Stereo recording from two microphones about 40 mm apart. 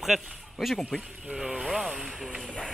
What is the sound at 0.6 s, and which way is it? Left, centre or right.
Speech, centre.